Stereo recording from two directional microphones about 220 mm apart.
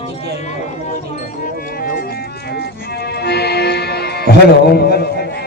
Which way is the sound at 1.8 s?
40° left (ahead or behind).